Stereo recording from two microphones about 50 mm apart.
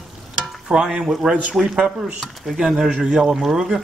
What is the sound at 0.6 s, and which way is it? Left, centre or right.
A man's voice, centre.